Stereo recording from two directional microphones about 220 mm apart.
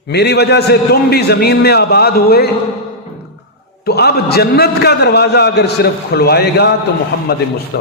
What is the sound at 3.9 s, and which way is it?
A man's voice, 45° left (ahead or behind).